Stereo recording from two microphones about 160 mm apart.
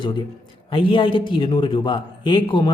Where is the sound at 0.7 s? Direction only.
35° left (ahead or behind).